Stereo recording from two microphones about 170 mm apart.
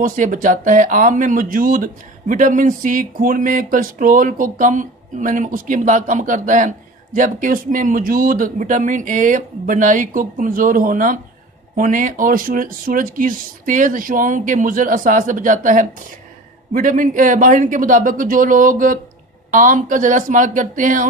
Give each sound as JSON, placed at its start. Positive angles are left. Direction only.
{"t": 0.0, "sound": "speech", "side_deg": -50}